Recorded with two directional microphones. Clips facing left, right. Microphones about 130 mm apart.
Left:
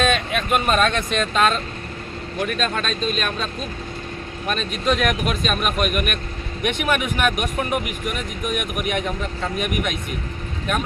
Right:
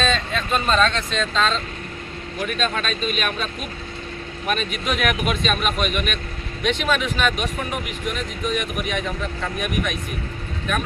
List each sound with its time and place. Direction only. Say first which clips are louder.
0.0 s speech: left 2 dB; 15° left (ahead or behind)
2.4 s speech: left 1 dB; centre (ahead or behind)
6.6 s speech: even; 15° left (ahead or behind)
8.4 s speech: even; 15° left (ahead or behind)